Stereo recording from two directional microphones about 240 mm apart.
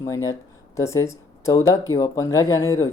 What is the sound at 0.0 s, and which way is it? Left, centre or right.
Speech, centre.